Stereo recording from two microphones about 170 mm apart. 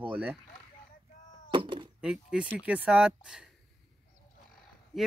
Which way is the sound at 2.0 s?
5° right (ahead or behind).